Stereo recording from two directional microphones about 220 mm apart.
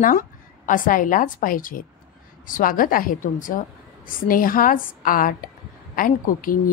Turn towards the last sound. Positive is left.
turn(degrees=40)  # may be behind; listen again after turning